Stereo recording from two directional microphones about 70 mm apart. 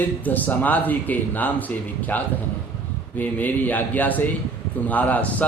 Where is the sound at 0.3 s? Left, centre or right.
Left.